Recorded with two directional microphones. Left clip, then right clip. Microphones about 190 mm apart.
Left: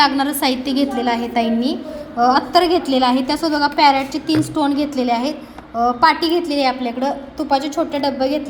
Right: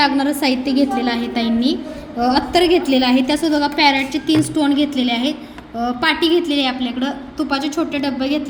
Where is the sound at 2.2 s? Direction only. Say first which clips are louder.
Left 1 dB; centre (ahead or behind).